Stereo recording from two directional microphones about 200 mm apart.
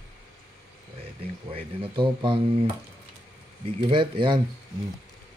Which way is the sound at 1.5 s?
25° right (ahead or behind).